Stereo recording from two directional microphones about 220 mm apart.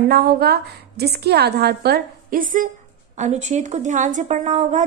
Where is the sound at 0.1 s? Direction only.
45° right (ahead or behind).